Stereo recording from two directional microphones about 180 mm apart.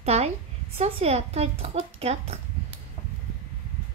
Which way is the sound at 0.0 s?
35° right (ahead or behind).